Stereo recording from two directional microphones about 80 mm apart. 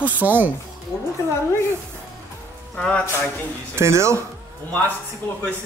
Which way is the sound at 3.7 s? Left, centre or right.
Right.